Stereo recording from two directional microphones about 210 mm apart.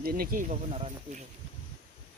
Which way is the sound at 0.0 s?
45° right (ahead or behind).